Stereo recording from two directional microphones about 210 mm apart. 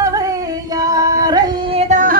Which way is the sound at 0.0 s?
15° right (ahead or behind).